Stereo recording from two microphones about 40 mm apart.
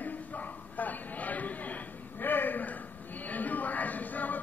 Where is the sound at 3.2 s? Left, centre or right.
Left.